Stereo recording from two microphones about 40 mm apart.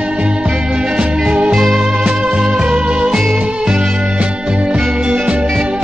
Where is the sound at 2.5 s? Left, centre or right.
Right.